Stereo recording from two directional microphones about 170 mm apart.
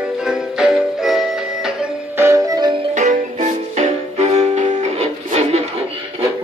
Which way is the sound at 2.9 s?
45° right (ahead or behind).